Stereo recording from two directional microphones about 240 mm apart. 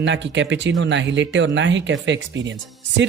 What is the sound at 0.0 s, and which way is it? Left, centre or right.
Speech, right.